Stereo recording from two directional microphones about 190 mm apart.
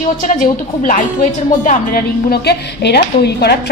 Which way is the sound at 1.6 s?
45° left (ahead or behind).